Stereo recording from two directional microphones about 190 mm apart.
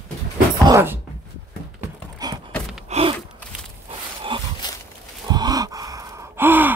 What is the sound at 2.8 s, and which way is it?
Gasp, 35° right (ahead or behind).